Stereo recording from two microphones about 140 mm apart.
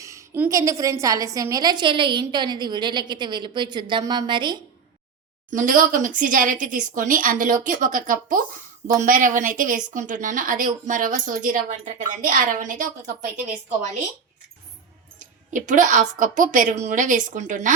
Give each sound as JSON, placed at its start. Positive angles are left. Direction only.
{"t": 0.0, "sound": "a woman's voice", "side_deg": -20}
{"t": 5.5, "sound": "a woman's voice", "side_deg": -70}
{"t": 15.2, "sound": "speech", "side_deg": -65}